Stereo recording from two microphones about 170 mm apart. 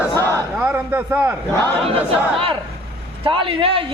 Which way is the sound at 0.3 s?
15° right (ahead or behind).